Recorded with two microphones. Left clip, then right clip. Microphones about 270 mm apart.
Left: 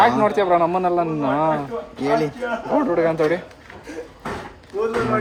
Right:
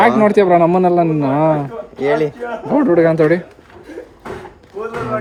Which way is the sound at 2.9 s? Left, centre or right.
Right.